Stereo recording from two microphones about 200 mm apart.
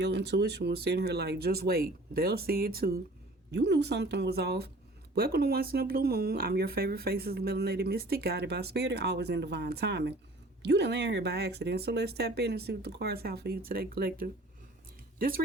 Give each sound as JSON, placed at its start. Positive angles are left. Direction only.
{"t": 0.0, "sound": "speech", "side_deg": -55}